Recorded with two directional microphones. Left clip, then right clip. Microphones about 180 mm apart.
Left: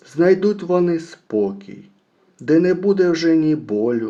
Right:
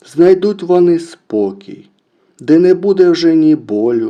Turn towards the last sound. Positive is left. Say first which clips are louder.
# right 6 dB
turn(degrees=-40)  # may be behind; listen again after turning